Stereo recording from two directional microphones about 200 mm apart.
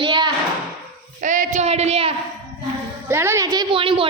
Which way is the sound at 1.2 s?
40° right (ahead or behind).